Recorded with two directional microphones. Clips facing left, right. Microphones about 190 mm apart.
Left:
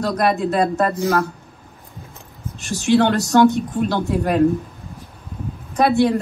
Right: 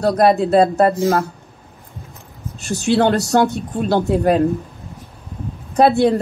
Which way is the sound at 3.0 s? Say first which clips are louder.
Left 1 dB; 35° right (ahead or behind).